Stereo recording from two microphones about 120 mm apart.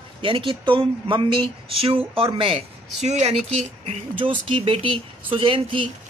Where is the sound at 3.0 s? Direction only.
70° right (ahead or behind).